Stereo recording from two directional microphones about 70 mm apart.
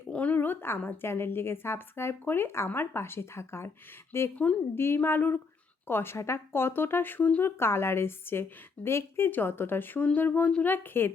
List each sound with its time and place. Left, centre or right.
0.1 s speech: left
7.6 s speech: left